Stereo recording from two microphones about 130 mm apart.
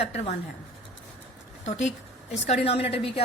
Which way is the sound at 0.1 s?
60° left (ahead or behind).